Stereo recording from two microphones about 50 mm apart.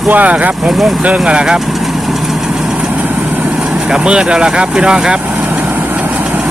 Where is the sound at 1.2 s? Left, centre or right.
Centre.